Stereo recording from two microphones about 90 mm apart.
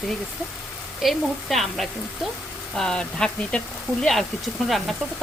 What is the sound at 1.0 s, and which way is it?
Speech, centre (ahead or behind).